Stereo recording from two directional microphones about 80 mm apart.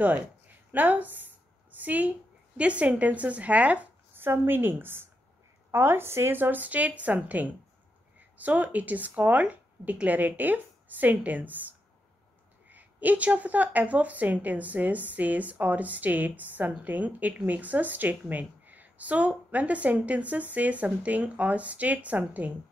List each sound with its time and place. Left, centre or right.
0.7 s a woman's voice: right
4.2 s speech: right
12.6 s speech: centre